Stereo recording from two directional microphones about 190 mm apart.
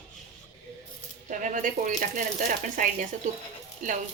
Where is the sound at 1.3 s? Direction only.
40° right (ahead or behind).